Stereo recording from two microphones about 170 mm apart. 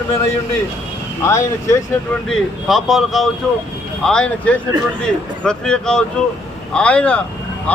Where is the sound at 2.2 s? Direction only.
Centre (ahead or behind).